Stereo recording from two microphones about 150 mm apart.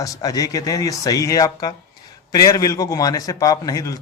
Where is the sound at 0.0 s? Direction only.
25° left (ahead or behind).